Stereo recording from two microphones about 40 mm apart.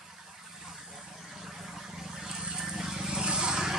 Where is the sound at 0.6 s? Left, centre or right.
Centre.